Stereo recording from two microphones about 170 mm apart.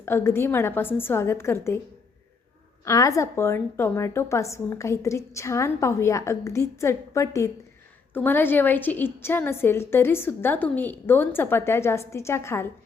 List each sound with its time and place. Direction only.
0.0 s a woman's voice: 15° left (ahead or behind)
2.8 s a woman's voice: 20° left (ahead or behind)